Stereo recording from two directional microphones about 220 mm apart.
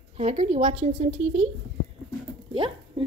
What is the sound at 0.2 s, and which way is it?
A woman's voice, 30° right (ahead or behind).